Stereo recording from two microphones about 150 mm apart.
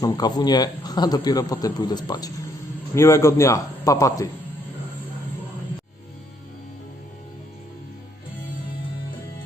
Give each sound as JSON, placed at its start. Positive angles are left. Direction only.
{"t": 0.0, "sound": "a man's voice", "side_deg": 25}